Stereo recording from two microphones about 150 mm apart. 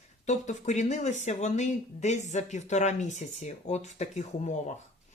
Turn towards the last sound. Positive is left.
turn(degrees=50)  # may be behind; listen again after turning